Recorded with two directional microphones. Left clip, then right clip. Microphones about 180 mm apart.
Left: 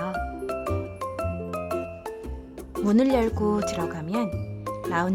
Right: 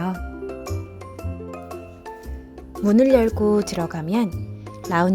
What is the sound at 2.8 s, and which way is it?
A woman's voice, 15° right (ahead or behind).